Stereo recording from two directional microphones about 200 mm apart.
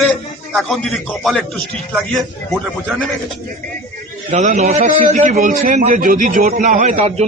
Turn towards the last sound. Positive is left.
turn(degrees=-35)  # may be behind; listen again after turning